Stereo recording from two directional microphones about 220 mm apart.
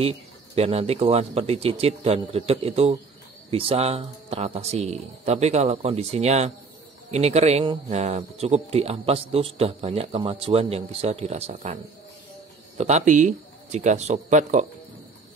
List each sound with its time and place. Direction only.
0.6 s speech: 30° right (ahead or behind)